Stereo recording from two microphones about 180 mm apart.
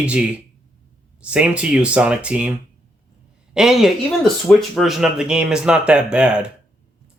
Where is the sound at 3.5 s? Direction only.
Centre (ahead or behind).